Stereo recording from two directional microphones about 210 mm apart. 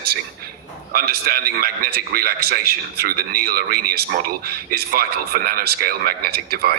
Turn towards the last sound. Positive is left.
turn(degrees=-50)  # may be behind; listen again after turning